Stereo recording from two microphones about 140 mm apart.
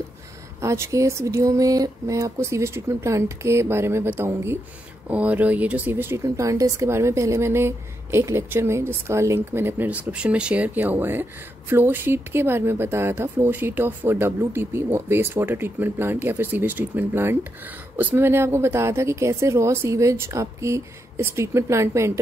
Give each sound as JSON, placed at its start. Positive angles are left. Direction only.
{"t": 0.6, "sound": "speech", "side_deg": -20}